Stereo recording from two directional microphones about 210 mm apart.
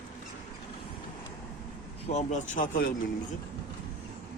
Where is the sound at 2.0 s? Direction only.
35° left (ahead or behind).